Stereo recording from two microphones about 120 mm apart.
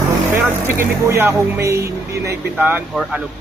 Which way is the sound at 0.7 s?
20° right (ahead or behind).